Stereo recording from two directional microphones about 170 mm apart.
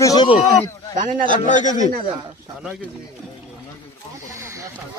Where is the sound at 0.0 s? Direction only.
20° left (ahead or behind).